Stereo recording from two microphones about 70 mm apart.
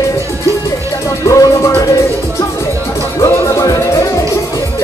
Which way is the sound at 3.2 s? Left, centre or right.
Left.